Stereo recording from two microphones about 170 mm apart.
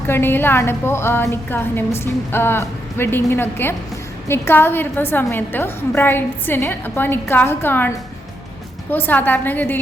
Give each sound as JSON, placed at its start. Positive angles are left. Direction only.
{"t": 0.1, "sound": "a woman's voice", "side_deg": 10}